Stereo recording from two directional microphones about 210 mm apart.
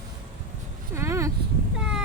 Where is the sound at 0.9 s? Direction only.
15° right (ahead or behind).